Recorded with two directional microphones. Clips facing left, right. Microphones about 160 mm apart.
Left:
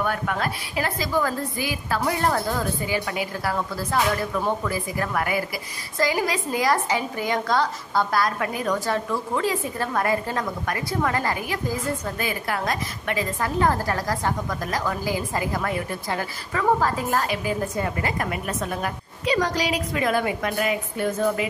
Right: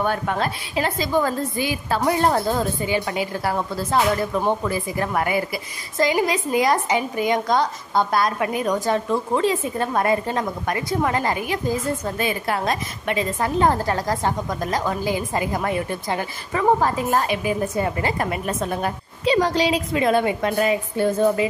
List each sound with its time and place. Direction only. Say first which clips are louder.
0.0 s a woman's voice: right 3 dB; 30° right (ahead or behind)